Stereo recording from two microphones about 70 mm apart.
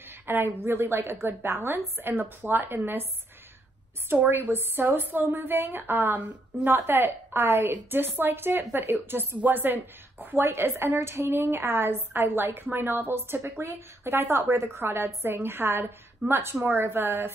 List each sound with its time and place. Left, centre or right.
0.3 s a woman's voice: right
4.3 s a woman's voice: right